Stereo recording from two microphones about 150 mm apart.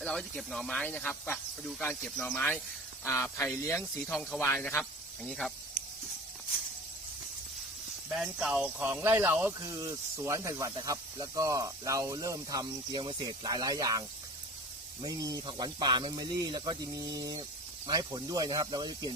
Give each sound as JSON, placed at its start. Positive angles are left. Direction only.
{"t": 0.0, "sound": "speech", "side_deg": 5}
{"t": 4.8, "sound": "speech", "side_deg": 5}
{"t": 8.1, "sound": "speech", "side_deg": -5}
{"t": 15.0, "sound": "speech", "side_deg": -25}